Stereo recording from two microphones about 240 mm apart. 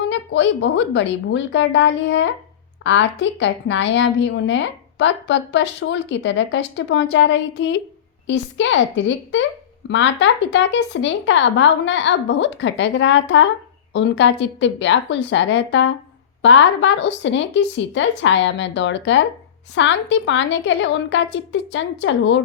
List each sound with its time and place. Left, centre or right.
0.0 s a woman's voice: left